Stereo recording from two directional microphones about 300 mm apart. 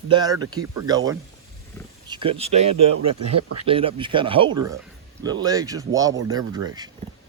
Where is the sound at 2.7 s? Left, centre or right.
Right.